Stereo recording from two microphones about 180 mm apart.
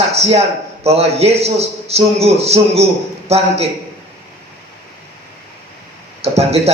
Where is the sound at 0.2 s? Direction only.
35° right (ahead or behind).